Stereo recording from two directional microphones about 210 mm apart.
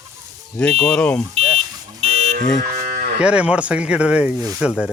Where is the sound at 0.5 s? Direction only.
5° left (ahead or behind).